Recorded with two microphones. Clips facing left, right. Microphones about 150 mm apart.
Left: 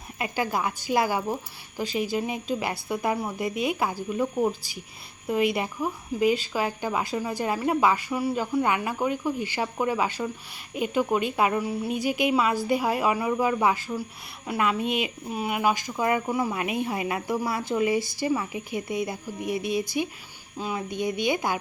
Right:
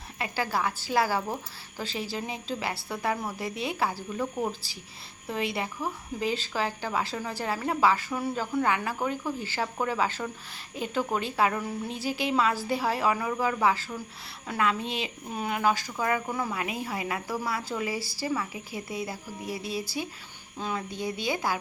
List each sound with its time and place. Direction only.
0.2 s a woman's voice: 15° left (ahead or behind)